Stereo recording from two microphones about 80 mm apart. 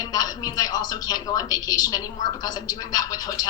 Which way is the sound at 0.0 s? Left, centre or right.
Left.